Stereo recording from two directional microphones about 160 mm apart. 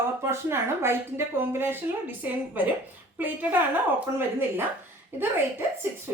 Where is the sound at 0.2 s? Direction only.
15° right (ahead or behind).